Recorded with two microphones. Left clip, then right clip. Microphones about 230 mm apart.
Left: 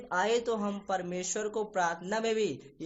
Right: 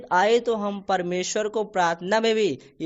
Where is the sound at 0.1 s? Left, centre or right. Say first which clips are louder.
Right 9 dB; right.